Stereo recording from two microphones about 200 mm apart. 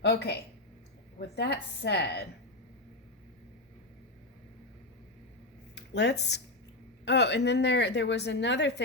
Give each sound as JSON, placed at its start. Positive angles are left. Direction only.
{"t": 0.0, "sound": "a woman's voice", "side_deg": 55}
{"t": 5.7, "sound": "a woman's voice", "side_deg": 60}